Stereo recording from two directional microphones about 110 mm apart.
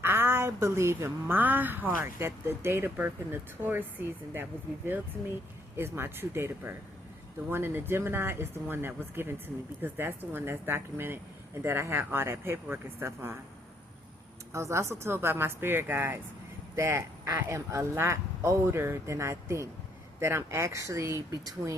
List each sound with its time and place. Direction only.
0.0 s a woman's voice: 20° right (ahead or behind)
5.7 s speech: 20° right (ahead or behind)
14.5 s speech: 25° right (ahead or behind)